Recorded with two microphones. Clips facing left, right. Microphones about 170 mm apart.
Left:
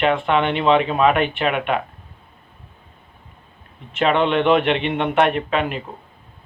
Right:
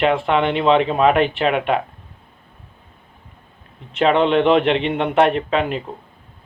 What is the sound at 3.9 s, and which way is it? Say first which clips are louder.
A man's voice: right 2 dB; 30° right (ahead or behind).